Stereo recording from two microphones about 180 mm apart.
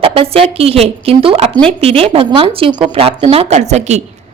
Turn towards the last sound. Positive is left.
turn(degrees=-40)  # may be behind; listen again after turning